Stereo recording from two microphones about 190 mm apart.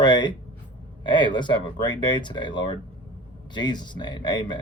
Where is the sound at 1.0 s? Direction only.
25° left (ahead or behind).